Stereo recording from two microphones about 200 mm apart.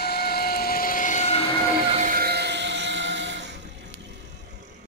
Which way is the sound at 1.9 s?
40° right (ahead or behind).